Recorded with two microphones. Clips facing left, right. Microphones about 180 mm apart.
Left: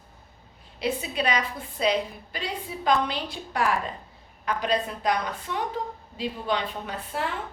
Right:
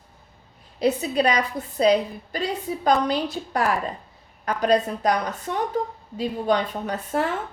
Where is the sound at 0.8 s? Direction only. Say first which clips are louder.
Right 7 dB; 40° right (ahead or behind).